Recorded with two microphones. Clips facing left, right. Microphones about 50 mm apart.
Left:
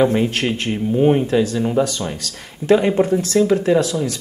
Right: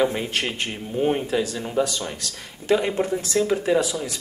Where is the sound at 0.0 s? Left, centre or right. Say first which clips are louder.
Left 7 dB; centre.